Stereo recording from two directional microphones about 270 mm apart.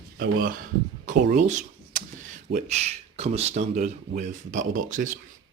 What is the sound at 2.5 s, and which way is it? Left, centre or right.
Speech, right.